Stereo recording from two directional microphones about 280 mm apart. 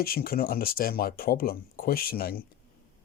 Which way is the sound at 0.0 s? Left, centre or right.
Left.